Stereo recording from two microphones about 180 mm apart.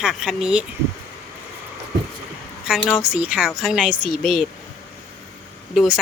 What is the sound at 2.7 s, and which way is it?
Speech, 5° right (ahead or behind).